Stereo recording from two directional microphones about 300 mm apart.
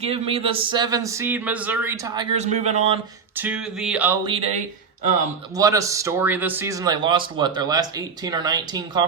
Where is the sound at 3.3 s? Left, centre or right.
Centre.